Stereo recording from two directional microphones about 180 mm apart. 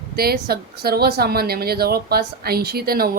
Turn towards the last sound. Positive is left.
turn(degrees=-55)  # may be behind; listen again after turning